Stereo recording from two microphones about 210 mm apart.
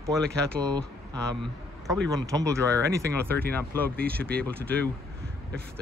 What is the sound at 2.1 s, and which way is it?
Speech, 15° right (ahead or behind).